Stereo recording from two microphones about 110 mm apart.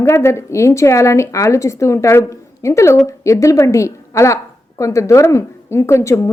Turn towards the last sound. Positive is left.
turn(degrees=25)  # may be behind; listen again after turning